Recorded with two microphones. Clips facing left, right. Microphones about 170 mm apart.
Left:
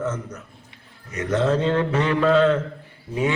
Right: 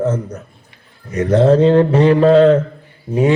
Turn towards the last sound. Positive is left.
turn(degrees=-35)  # may be behind; listen again after turning